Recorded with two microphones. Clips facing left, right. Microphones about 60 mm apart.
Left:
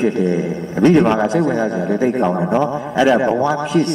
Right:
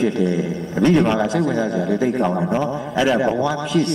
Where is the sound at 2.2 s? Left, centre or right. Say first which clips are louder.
Left 3 dB; centre.